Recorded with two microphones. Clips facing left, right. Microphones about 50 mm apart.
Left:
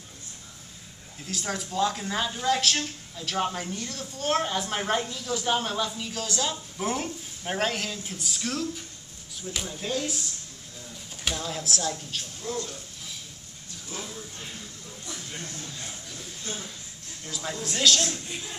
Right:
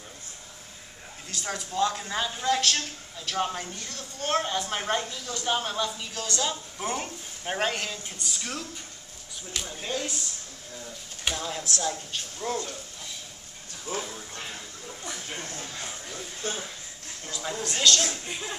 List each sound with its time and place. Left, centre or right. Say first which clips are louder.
1.2 s speech: left 2 dB; centre
9.5 s speech: left 2 dB; centre
9.8 s speech: left 2 dB; centre
11.2 s speech: even; centre
12.4 s speech: right 3 dB; right
13.9 s a woman's voice: right 5 dB; right
15.0 s a sound: right 2 dB; right
17.3 s a sound: even; centre
17.6 s speech: even; centre
18.0 s a woman's voice: even; right